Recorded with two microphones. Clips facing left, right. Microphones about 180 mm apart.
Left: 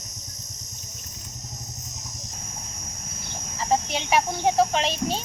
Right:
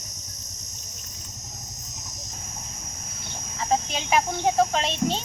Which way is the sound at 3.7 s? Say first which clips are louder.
Left 1 dB; 5° left (ahead or behind).